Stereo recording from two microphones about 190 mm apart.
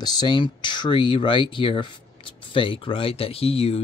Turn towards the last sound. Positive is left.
turn(degrees=30)  # may be behind; listen again after turning